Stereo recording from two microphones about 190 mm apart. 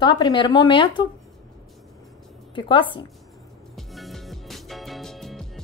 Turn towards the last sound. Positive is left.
turn(degrees=0)  # may be behind; listen again after turning